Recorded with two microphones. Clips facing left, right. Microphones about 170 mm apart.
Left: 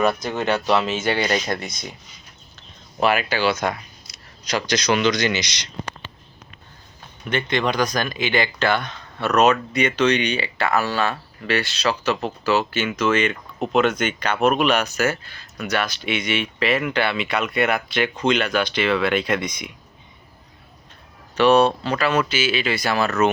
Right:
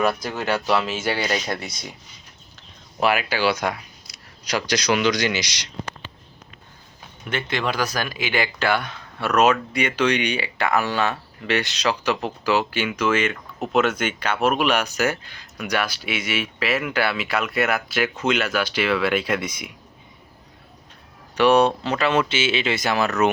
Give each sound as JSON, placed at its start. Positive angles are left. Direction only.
{"t": 0.2, "sound": "speech", "side_deg": -10}
{"t": 3.0, "sound": "speech", "side_deg": -10}
{"t": 7.3, "sound": "speech", "side_deg": -5}
{"t": 21.3, "sound": "speech", "side_deg": -15}